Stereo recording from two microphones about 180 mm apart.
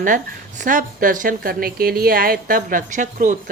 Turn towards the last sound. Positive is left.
turn(degrees=-45)  # may be behind; listen again after turning